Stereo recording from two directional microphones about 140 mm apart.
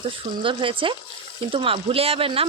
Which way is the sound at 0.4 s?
35° right (ahead or behind).